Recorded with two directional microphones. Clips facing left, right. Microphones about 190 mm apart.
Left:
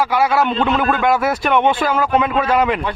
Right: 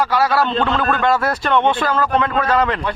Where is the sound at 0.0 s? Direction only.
10° left (ahead or behind).